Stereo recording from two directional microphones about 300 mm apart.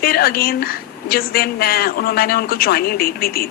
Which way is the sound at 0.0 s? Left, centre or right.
Left.